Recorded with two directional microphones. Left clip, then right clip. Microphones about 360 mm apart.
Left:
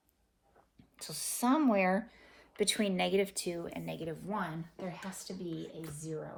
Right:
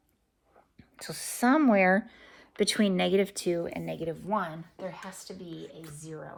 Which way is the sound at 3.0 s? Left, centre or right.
Right.